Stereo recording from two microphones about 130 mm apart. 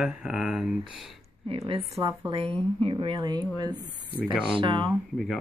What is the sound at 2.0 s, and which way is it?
Speech, 20° right (ahead or behind).